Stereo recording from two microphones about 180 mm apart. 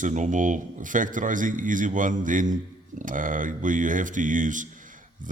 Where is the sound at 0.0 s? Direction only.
45° right (ahead or behind).